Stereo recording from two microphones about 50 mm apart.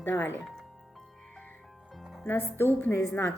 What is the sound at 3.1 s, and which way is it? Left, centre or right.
Speech, left.